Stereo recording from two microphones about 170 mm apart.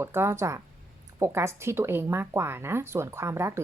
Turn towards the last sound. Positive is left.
turn(degrees=-15)  # may be behind; listen again after turning